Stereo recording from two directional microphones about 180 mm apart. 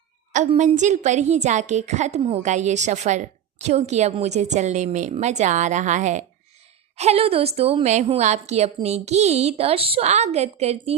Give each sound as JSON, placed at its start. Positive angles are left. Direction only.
{"t": 0.3, "sound": "a woman's voice", "side_deg": -40}